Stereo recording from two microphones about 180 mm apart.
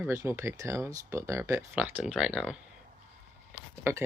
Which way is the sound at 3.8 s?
15° right (ahead or behind).